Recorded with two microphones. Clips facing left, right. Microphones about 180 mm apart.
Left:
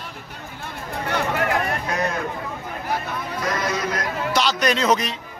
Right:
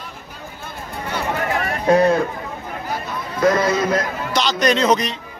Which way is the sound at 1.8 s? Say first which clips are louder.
Right 11 dB; 30° right (ahead or behind).